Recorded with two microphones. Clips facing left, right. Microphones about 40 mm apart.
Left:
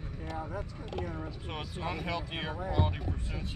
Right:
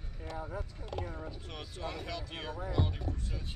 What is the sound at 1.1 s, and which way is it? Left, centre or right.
Speech, left.